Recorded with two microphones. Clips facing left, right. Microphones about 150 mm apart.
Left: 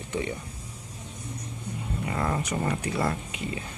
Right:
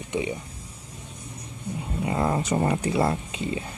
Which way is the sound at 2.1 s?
25° right (ahead or behind).